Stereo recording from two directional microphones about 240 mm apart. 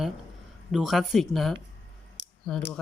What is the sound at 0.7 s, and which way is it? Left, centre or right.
Speech, centre.